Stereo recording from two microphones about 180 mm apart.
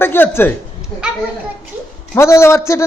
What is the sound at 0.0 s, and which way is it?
Speech, 10° left (ahead or behind).